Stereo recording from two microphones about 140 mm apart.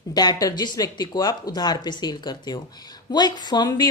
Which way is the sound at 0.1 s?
30° left (ahead or behind).